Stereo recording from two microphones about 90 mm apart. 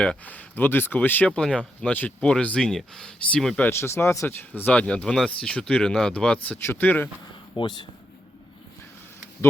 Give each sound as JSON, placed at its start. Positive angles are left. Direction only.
{"t": 0.0, "sound": "speech", "side_deg": 15}
{"t": 3.7, "sound": "speech", "side_deg": 30}
{"t": 7.5, "sound": "speech", "side_deg": 55}